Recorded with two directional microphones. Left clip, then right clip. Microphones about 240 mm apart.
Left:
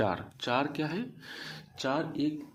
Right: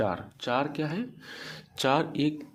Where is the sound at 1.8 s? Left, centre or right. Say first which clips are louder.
Right 6 dB; right.